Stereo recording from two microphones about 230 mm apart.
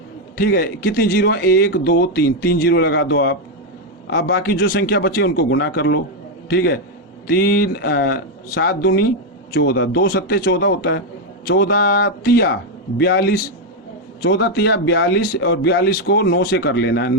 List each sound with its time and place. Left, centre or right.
0.3 s a man's voice: left